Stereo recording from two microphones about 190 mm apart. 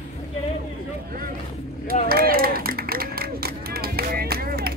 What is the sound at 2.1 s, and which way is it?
Run, 50° right (ahead or behind).